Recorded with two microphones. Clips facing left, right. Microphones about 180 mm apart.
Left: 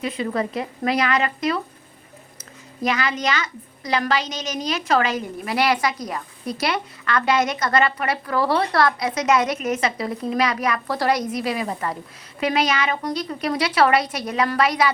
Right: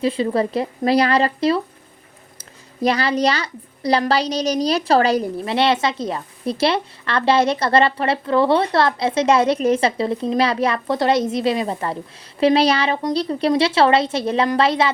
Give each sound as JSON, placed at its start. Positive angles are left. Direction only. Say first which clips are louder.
{"t": 0.0, "sound": "speech", "louder": "right 5 dB", "side_deg": -30}
{"t": 2.8, "sound": "a woman's voice", "louder": "right 5 dB", "side_deg": -35}